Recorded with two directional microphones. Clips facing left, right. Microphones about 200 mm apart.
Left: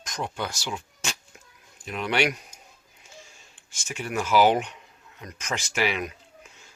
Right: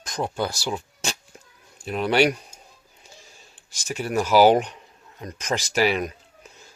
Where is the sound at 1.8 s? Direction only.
35° right (ahead or behind).